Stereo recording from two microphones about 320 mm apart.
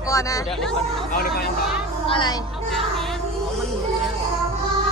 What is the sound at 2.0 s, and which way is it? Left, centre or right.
Speech, centre.